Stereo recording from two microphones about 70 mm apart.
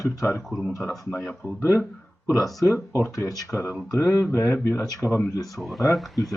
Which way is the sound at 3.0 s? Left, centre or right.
Left.